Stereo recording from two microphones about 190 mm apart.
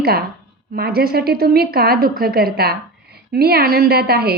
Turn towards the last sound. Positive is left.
turn(degrees=-55)  # may be behind; listen again after turning